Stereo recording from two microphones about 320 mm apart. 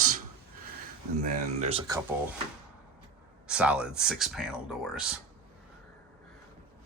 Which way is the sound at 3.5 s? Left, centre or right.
Centre.